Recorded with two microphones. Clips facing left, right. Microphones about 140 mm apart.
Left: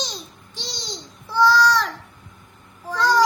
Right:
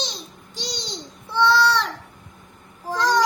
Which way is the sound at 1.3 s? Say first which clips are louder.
Left 1 dB; centre (ahead or behind).